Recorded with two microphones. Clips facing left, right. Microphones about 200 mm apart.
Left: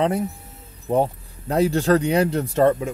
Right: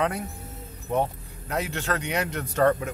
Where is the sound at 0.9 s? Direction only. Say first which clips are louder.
Left 6 dB; 35° left (ahead or behind).